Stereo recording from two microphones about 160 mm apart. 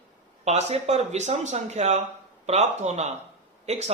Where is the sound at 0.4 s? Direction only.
45° right (ahead or behind).